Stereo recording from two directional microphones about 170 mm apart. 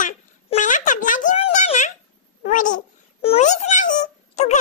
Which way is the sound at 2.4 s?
50° left (ahead or behind).